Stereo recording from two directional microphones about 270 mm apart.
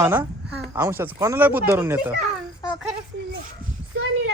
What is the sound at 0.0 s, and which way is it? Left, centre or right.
Speech, centre.